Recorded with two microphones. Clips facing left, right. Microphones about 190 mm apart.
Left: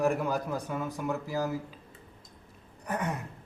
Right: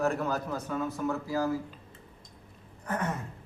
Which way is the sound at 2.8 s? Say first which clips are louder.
Even; 15° left (ahead or behind).